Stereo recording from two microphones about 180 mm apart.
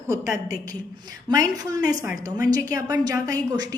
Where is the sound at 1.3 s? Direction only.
20° right (ahead or behind).